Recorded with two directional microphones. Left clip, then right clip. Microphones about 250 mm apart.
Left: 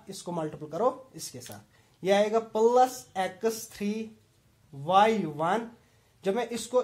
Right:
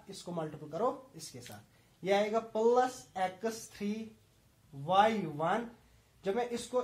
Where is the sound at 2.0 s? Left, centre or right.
Left.